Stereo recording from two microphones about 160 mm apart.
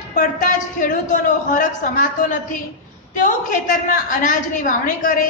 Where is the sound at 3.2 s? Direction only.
55° left (ahead or behind).